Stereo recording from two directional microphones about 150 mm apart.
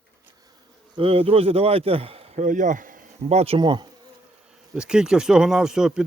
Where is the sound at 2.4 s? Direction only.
55° right (ahead or behind); by 3.8 s 30° right (ahead or behind).